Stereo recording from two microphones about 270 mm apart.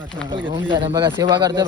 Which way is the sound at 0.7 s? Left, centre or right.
Centre.